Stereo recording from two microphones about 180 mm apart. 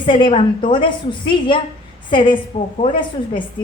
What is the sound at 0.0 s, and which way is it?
A woman's voice, 25° left (ahead or behind).